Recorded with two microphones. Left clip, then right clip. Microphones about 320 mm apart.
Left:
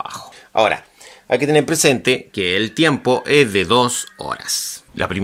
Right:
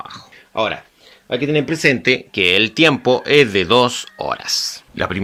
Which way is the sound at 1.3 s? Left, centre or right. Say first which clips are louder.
Left 3 dB; left.